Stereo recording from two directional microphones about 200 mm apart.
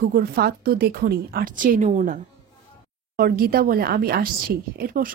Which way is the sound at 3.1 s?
50° right (ahead or behind).